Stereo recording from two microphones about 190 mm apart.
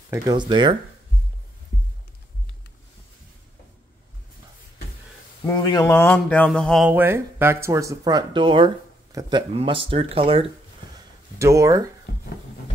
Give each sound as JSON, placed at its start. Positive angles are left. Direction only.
{"t": 0.1, "sound": "speech", "side_deg": -20}
{"t": 5.5, "sound": "a sound", "side_deg": 20}
{"t": 6.9, "sound": "speech", "side_deg": -10}
{"t": 11.3, "sound": "speech", "side_deg": -15}